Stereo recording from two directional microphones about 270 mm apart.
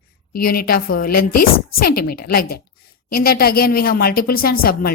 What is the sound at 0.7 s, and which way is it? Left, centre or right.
Speech, left.